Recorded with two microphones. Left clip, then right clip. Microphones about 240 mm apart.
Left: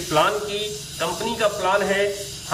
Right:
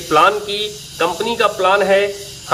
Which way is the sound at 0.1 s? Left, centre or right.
Right.